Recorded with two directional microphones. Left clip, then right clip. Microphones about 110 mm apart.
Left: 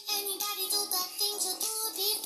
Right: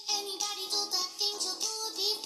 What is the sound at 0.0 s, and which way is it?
Music, 50° left (ahead or behind).